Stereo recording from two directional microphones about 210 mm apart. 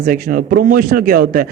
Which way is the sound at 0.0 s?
45° right (ahead or behind).